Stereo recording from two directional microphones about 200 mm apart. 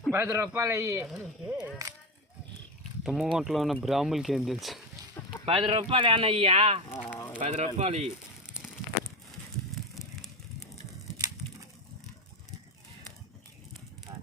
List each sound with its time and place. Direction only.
0.1 s a man's voice: 10° right (ahead or behind)
3.0 s speech: centre (ahead or behind)
5.5 s speech: 30° right (ahead or behind)
6.9 s fowl: 10° left (ahead or behind)
7.3 s speech: 35° right (ahead or behind)
11.2 s a sound: 20° right (ahead or behind)